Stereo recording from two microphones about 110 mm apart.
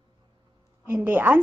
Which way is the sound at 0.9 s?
15° right (ahead or behind).